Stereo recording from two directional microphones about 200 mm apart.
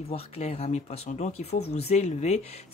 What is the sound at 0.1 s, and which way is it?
Speech, 30° left (ahead or behind).